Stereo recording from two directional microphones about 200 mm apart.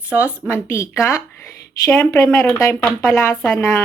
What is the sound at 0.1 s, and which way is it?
Speech, 5° right (ahead or behind).